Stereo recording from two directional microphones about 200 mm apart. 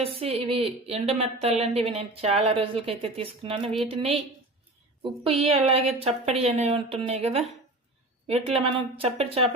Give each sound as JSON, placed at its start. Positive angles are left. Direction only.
{"t": 0.0, "sound": "a woman's voice", "side_deg": -30}